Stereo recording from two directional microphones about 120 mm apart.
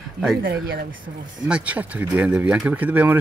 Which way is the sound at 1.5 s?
10° right (ahead or behind).